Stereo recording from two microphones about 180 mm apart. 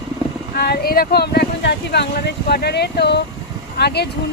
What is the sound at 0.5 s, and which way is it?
Speech, 60° left (ahead or behind).